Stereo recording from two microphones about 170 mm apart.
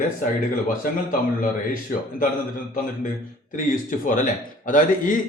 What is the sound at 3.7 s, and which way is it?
A man's voice, 50° left (ahead or behind).